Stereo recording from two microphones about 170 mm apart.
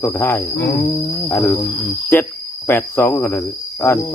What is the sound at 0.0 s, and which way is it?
Cricket, 15° left (ahead or behind).